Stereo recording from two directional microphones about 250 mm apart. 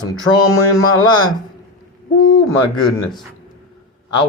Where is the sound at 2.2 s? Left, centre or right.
Left.